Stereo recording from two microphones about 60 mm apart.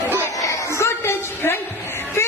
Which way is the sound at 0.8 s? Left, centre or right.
Left.